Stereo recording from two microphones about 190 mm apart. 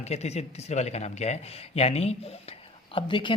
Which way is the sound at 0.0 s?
35° left (ahead or behind).